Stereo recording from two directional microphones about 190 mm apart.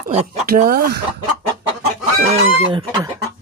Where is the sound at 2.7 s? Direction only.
25° right (ahead or behind).